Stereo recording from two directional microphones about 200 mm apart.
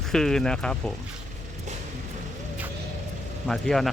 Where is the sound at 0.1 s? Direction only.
5° left (ahead or behind).